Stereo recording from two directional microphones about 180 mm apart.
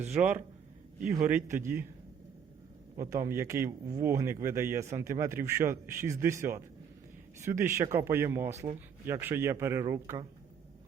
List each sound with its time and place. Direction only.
0.1 s speech: 5° right (ahead or behind)
3.0 s speech: 15° right (ahead or behind)